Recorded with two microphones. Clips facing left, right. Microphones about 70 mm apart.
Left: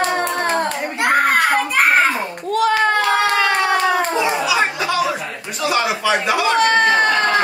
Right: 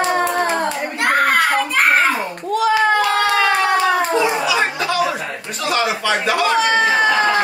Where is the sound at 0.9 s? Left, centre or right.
Centre.